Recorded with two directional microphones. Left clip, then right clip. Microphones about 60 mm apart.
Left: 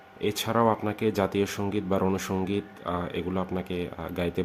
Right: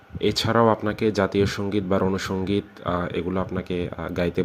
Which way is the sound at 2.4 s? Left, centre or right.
Right.